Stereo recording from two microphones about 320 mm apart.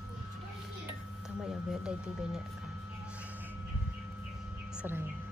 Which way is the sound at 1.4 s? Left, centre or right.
Centre.